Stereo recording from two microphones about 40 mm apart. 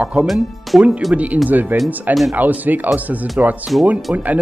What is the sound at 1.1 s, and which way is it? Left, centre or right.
A man's voice, right.